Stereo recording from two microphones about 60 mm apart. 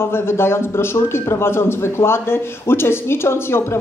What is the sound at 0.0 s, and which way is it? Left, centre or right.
A man's voice, left.